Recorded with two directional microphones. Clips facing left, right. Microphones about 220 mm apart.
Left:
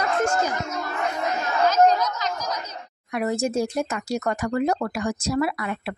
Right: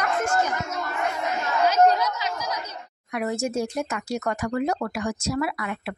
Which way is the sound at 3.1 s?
35° left (ahead or behind).